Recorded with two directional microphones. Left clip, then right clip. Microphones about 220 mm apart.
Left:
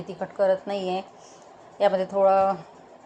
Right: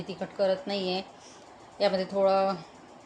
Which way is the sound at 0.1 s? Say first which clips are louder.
Left 5 dB; centre (ahead or behind).